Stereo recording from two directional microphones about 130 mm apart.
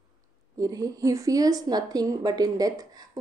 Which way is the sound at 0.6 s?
25° right (ahead or behind).